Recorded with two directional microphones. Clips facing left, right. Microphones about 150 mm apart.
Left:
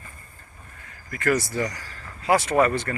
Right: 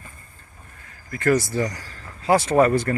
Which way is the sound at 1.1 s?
30° right (ahead or behind).